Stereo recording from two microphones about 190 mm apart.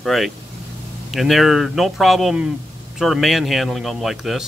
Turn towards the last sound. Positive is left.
turn(degrees=0)  # may be behind; listen again after turning